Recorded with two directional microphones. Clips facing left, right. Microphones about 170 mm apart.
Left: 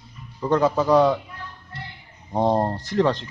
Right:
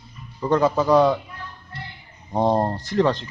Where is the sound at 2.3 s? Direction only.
Centre (ahead or behind).